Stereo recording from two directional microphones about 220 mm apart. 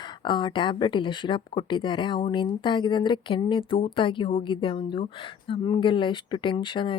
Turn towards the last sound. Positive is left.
turn(degrees=20)  # may be behind; listen again after turning